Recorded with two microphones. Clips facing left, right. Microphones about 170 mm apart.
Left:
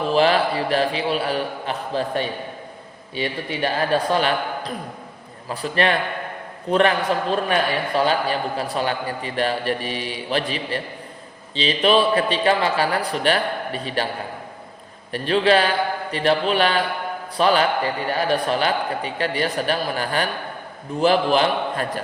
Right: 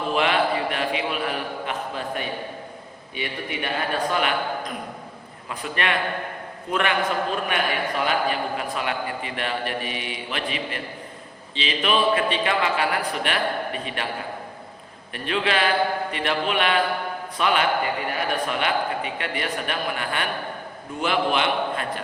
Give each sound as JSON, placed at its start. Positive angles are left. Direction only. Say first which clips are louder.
{"t": 0.1, "sound": "a man's voice", "louder": "left 3 dB", "side_deg": 35}
{"t": 15.1, "sound": "a man's voice", "louder": "left 7 dB", "side_deg": 35}